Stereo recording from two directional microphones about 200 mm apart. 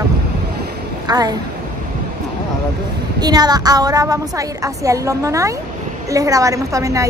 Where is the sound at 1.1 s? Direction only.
20° right (ahead or behind).